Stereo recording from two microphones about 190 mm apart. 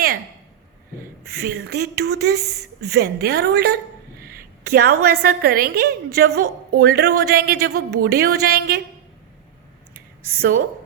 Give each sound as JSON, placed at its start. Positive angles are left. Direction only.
{"t": 1.4, "sound": "a woman's voice", "side_deg": -60}
{"t": 4.7, "sound": "a woman's voice", "side_deg": -55}
{"t": 10.3, "sound": "a woman's voice", "side_deg": -50}